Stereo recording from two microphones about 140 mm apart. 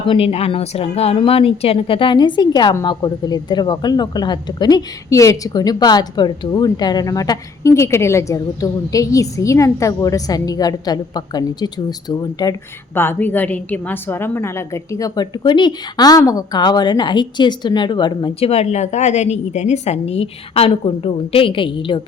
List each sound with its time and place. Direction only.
0.1 s a woman's voice: 45° left (ahead or behind); by 12.5 s 30° left (ahead or behind)
12.9 s a woman's voice: 15° left (ahead or behind); by 22.0 s 35° left (ahead or behind)